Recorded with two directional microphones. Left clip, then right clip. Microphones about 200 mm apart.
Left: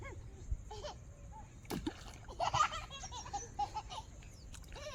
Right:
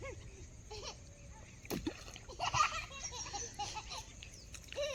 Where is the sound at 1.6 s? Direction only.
25° left (ahead or behind).